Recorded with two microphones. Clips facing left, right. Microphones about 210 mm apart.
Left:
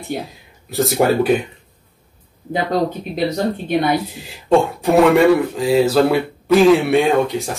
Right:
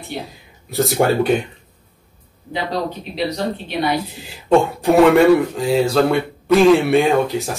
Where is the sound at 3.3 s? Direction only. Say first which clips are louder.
Left 4 dB; 50° left (ahead or behind).